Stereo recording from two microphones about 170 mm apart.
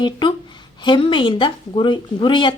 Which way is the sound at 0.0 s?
25° left (ahead or behind).